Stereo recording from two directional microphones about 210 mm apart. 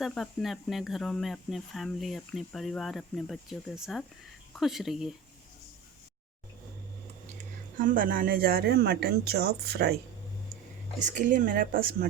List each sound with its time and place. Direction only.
0.0 s speech: centre (ahead or behind)
7.8 s speech: 40° right (ahead or behind)
11.0 s speech: 35° right (ahead or behind)